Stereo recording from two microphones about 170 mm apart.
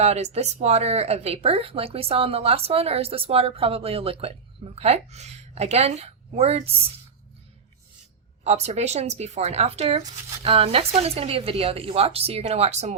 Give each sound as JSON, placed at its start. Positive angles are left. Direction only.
{"t": 0.0, "sound": "speech", "side_deg": -40}
{"t": 8.4, "sound": "speech", "side_deg": -40}